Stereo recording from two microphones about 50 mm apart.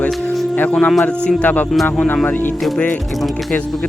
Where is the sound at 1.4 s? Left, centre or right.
Left.